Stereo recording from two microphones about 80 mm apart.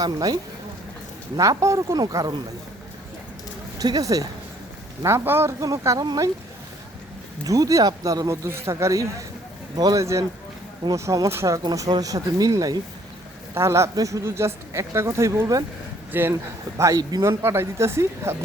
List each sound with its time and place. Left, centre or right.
0.0 s speech: right
1.4 s speech: right
3.8 s speech: right
5.0 s speech: right
7.4 s speech: right
8.4 s speech: right
10.0 s speech: right
13.5 s speech: right
16.1 s speech: right
16.7 s speech: right
17.0 s speech: right
17.2 s speech: right